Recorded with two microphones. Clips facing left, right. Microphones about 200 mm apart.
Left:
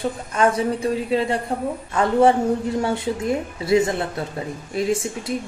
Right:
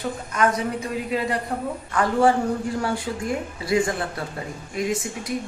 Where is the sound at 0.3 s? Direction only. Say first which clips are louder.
Left 3 dB; 30° left (ahead or behind).